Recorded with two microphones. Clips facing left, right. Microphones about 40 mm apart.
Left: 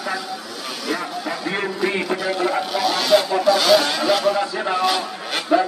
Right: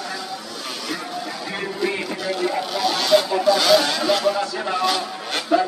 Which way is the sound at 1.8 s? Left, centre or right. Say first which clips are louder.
Left 2 dB; centre.